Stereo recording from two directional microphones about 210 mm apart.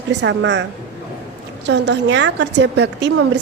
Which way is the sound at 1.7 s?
55° right (ahead or behind).